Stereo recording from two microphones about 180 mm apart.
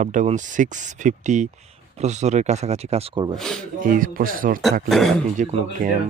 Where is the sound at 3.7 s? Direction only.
50° right (ahead or behind).